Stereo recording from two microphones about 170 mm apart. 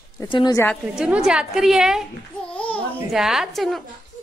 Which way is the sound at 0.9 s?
5° right (ahead or behind).